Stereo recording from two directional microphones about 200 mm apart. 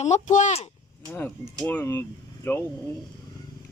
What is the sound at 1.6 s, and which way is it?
Speech, 10° left (ahead or behind).